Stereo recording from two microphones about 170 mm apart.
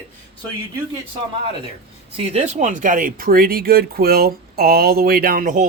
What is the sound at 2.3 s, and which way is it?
Speech, 40° right (ahead or behind).